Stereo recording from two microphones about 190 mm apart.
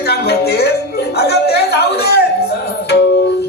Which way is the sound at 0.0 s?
60° left (ahead or behind).